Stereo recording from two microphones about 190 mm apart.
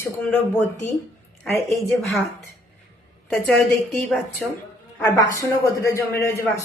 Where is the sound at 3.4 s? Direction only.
Centre (ahead or behind).